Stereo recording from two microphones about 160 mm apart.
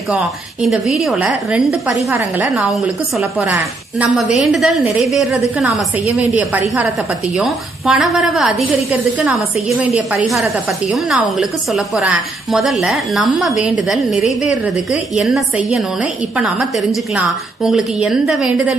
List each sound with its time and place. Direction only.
0.7 s a woman's voice: centre (ahead or behind)
7.3 s a woman's voice: centre (ahead or behind)
17.2 s a woman's voice: 5° right (ahead or behind)